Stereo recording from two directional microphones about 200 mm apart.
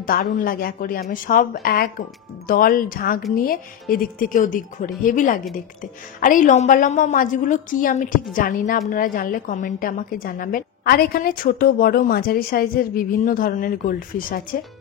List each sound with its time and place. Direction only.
0.0 s a woman's voice: 45° left (ahead or behind)